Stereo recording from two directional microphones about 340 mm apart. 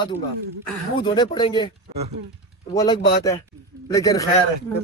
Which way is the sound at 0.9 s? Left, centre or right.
Centre.